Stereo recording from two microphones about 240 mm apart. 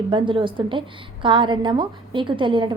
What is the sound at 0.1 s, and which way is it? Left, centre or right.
A woman's voice, right.